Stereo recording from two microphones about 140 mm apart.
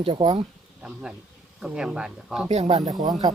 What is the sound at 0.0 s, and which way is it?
Speech, 40° right (ahead or behind).